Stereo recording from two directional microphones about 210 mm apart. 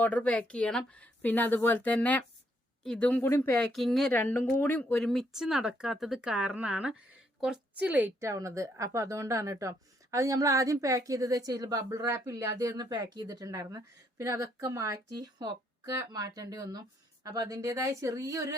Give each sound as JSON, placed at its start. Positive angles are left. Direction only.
{"t": 0.0, "sound": "a woman's voice", "side_deg": 5}